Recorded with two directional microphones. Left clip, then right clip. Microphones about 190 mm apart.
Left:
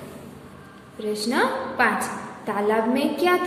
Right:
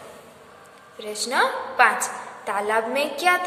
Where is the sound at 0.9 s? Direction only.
25° right (ahead or behind).